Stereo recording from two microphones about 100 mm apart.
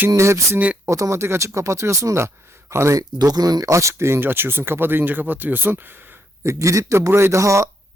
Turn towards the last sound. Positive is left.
turn(degrees=-30)  # may be behind; listen again after turning